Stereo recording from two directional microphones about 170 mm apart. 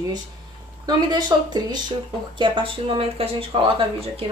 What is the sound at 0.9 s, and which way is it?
Speech, 25° right (ahead or behind).